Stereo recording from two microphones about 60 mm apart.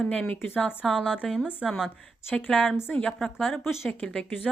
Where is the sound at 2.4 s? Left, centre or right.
Left.